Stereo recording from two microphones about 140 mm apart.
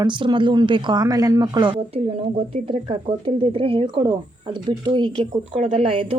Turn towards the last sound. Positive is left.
turn(degrees=-40)  # may be behind; listen again after turning